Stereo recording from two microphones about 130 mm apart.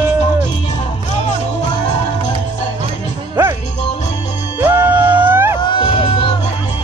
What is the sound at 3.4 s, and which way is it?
Music, 15° right (ahead or behind).